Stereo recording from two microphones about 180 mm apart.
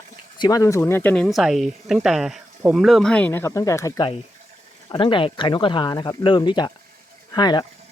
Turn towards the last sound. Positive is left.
turn(degrees=25)  # may be behind; listen again after turning